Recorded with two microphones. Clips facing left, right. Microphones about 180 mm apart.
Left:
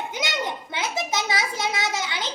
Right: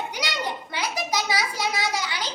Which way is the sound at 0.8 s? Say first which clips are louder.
Left 1 dB; 25° left (ahead or behind).